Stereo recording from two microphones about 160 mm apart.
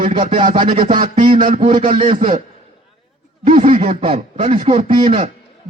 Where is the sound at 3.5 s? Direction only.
40° right (ahead or behind).